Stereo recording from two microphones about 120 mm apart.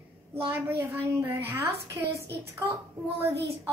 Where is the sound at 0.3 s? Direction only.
20° right (ahead or behind).